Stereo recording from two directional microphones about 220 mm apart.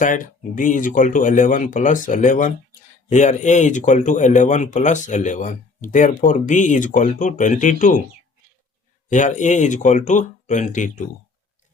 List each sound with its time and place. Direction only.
0.0 s speech: 35° left (ahead or behind)
9.0 s speech: 35° left (ahead or behind)